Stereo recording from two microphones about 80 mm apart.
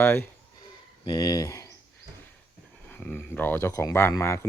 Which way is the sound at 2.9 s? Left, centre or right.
Left.